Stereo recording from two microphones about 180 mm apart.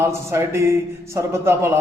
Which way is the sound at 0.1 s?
15° right (ahead or behind).